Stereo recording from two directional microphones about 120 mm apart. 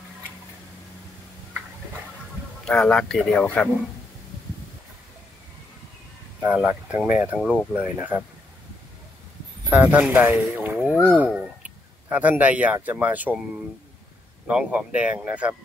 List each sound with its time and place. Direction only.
2.6 s speech: 5° left (ahead or behind)
6.4 s speech: 15° right (ahead or behind)
9.7 s speech: 15° right (ahead or behind)
14.5 s speech: 10° right (ahead or behind)